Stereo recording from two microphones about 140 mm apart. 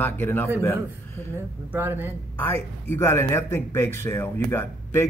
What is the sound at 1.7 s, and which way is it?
Speech, 15° right (ahead or behind).